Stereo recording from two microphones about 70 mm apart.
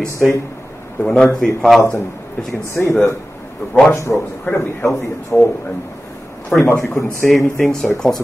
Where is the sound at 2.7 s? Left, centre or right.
Left.